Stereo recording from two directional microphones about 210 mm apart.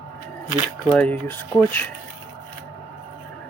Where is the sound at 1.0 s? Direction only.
10° left (ahead or behind).